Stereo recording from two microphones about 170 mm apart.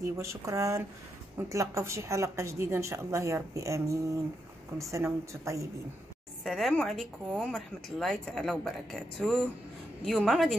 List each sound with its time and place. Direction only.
0.0 s speech: 15° right (ahead or behind)
6.4 s a woman's voice: centre (ahead or behind)